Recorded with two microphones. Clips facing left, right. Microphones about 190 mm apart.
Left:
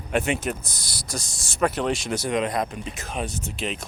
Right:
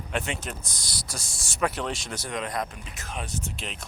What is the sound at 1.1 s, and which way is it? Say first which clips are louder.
Speech: left 6 dB; 40° left (ahead or behind).